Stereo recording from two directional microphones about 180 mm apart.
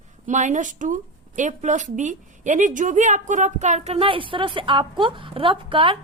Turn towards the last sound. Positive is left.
turn(degrees=-30)  # may be behind; listen again after turning